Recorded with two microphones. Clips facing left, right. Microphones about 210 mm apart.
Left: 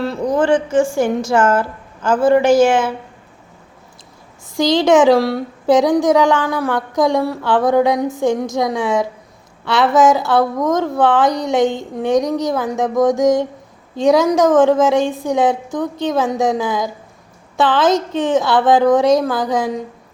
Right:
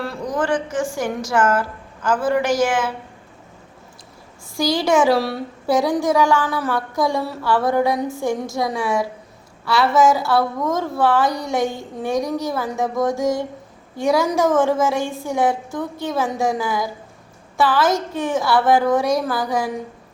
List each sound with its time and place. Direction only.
0.3 s a woman's voice: 25° left (ahead or behind)
4.5 s a woman's voice: 20° left (ahead or behind)